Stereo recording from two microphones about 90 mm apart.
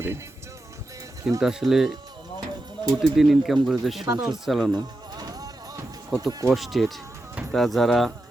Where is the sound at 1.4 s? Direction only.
5° right (ahead or behind).